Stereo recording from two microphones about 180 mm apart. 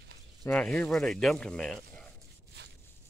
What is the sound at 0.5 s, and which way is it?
Speech, 10° left (ahead or behind).